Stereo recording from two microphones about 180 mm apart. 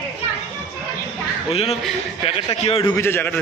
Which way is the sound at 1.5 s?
35° left (ahead or behind).